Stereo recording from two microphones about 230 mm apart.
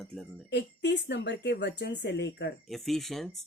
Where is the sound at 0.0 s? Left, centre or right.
Centre.